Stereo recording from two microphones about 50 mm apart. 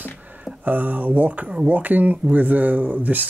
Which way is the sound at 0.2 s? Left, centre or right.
Right.